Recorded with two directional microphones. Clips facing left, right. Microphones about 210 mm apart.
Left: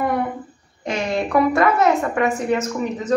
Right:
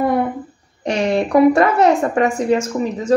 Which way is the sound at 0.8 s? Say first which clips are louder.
Right 5 dB; 30° right (ahead or behind).